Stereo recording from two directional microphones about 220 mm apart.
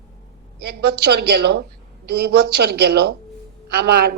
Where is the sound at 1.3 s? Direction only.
45° right (ahead or behind).